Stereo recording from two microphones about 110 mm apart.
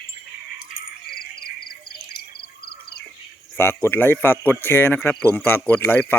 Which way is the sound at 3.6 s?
20° left (ahead or behind).